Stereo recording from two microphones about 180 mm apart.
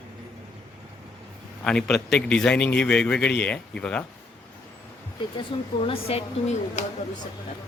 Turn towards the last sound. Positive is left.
turn(degrees=45)  # may be behind; listen again after turning